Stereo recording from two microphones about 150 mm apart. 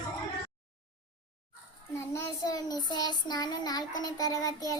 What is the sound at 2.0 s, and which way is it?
Child singing, 20° left (ahead or behind).